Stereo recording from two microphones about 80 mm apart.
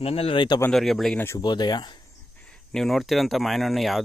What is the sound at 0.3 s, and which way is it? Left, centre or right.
Speech, left.